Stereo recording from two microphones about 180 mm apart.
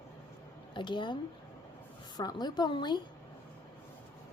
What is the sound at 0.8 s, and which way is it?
A woman's voice, 25° left (ahead or behind).